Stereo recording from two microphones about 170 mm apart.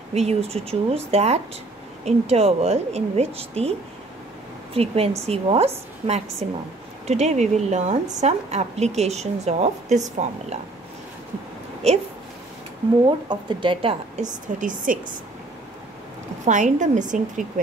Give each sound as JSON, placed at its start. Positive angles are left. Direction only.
{"t": 0.1, "sound": "a woman's voice", "side_deg": -40}
{"t": 4.7, "sound": "a woman's voice", "side_deg": -35}
{"t": 13.3, "sound": "speech", "side_deg": -25}
{"t": 14.1, "sound": "a woman's voice", "side_deg": -50}
{"t": 16.4, "sound": "a woman's voice", "side_deg": -45}